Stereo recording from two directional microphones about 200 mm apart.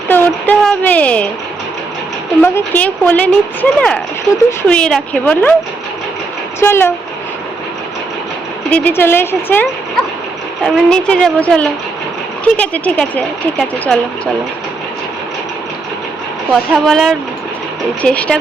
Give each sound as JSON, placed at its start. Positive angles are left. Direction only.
{"t": 0.1, "sound": "speech", "side_deg": 10}
{"t": 2.4, "sound": "a woman's voice", "side_deg": 10}
{"t": 6.6, "sound": "speech", "side_deg": 10}
{"t": 8.7, "sound": "a woman's voice", "side_deg": 10}
{"t": 16.5, "sound": "a woman's voice", "side_deg": 0}